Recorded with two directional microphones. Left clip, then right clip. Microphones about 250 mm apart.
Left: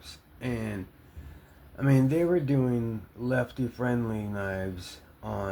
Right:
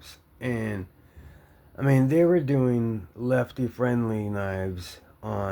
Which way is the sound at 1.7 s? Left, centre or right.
Right.